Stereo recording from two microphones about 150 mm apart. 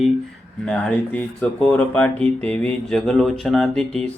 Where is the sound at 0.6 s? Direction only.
5° left (ahead or behind).